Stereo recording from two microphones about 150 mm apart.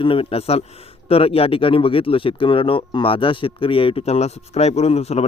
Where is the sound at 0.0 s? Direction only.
35° left (ahead or behind).